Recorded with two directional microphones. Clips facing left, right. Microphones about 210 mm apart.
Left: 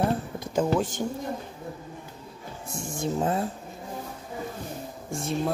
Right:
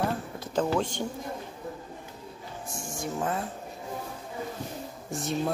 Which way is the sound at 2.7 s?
25° left (ahead or behind).